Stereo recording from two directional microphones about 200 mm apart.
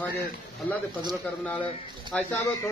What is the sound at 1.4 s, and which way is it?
Speech, 5° left (ahead or behind).